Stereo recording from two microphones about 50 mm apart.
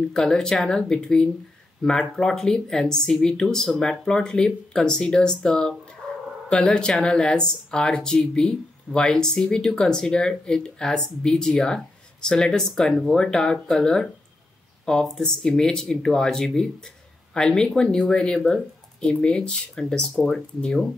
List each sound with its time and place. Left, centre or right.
0.1 s speech: centre
15.0 s speech: centre
20.3 s speech: centre